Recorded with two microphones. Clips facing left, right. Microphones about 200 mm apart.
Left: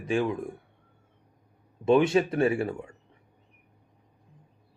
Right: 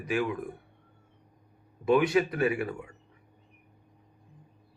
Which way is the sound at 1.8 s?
25° left (ahead or behind).